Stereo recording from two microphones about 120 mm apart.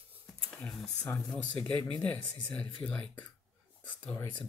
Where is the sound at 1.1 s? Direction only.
15° left (ahead or behind).